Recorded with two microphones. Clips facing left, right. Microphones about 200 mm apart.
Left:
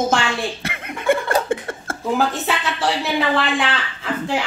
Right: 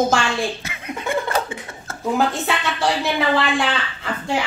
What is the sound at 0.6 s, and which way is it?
Laughter, 60° left (ahead or behind).